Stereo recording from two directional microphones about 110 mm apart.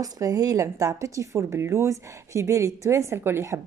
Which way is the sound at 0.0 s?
35° right (ahead or behind).